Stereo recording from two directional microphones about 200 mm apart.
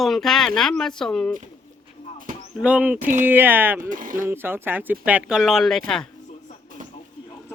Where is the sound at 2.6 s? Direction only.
5° right (ahead or behind).